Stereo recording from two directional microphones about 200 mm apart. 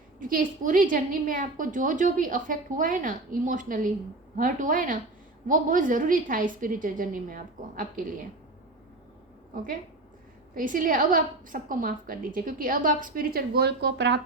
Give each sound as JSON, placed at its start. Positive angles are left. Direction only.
{"t": 0.2, "sound": "a woman's voice", "side_deg": -45}
{"t": 10.5, "sound": "a woman's voice", "side_deg": -40}